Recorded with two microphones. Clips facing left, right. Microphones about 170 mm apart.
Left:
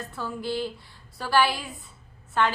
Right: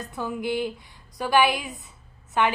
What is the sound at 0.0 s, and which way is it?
A woman's voice, 15° right (ahead or behind).